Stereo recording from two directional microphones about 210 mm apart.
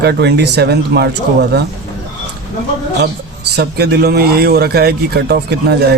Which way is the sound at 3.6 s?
50° right (ahead or behind).